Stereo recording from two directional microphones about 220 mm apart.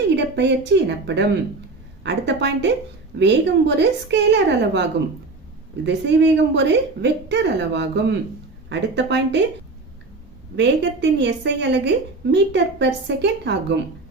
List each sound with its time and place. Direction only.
0.3 s a woman's voice: 50° right (ahead or behind)
10.6 s a woman's voice: 50° right (ahead or behind)